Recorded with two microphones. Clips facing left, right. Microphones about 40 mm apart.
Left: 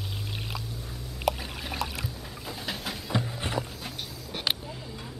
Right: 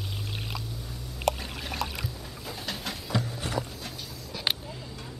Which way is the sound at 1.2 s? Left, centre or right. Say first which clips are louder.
Even; centre.